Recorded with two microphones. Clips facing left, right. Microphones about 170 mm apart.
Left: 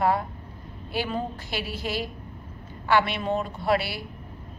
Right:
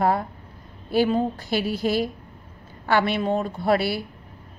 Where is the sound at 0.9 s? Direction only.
40° right (ahead or behind).